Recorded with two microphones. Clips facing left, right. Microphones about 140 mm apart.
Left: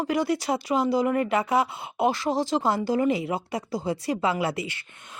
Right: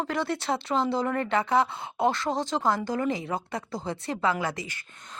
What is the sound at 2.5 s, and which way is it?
Speech, 20° left (ahead or behind).